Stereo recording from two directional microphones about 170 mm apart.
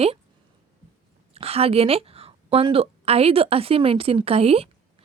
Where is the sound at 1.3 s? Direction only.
35° right (ahead or behind).